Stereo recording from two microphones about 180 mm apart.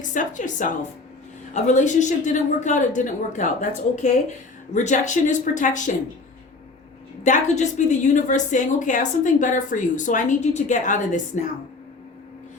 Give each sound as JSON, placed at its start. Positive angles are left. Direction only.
{"t": 0.0, "sound": "a woman's voice", "side_deg": 45}
{"t": 4.7, "sound": "a woman's voice", "side_deg": 40}
{"t": 7.3, "sound": "a woman's voice", "side_deg": 40}